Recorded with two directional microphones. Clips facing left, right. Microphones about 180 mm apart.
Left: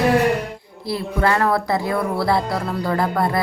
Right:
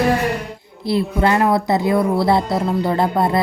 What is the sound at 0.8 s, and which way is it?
Speech, 20° right (ahead or behind).